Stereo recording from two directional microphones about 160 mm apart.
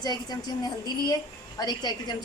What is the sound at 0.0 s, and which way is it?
A woman's voice, 25° left (ahead or behind).